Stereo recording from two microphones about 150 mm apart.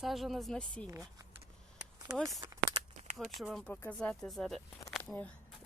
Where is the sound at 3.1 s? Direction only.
Centre (ahead or behind).